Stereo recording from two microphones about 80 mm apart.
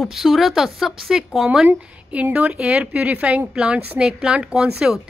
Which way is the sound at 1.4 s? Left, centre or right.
Centre.